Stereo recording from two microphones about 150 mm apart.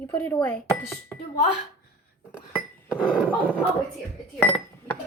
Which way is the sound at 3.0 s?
5° right (ahead or behind).